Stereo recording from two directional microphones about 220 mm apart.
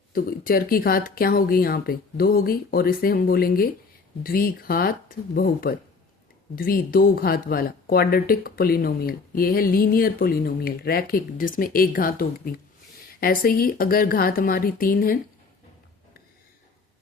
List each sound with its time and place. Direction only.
0.1 s speech: 40° left (ahead or behind)